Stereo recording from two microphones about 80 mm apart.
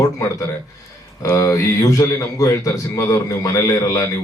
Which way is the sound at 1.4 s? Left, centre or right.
Left.